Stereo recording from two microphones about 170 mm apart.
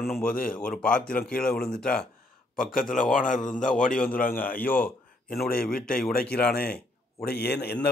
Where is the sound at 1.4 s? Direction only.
5° left (ahead or behind).